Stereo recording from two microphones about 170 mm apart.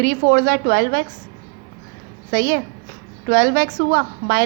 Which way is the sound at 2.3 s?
70° right (ahead or behind).